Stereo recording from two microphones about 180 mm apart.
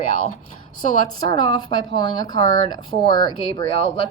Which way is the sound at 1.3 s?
25° left (ahead or behind).